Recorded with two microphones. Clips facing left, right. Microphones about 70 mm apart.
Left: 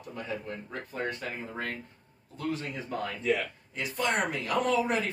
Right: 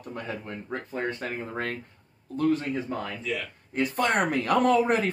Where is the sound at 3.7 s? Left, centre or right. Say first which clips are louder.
Right 5 dB; right.